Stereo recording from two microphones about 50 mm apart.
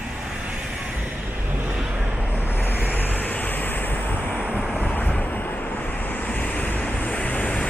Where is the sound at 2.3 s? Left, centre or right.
Left.